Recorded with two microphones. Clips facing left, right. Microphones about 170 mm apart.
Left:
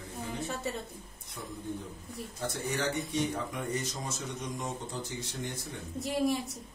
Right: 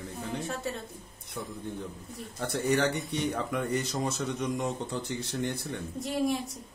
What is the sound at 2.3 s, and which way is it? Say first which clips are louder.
Speech: right 7 dB; 65° right (ahead or behind).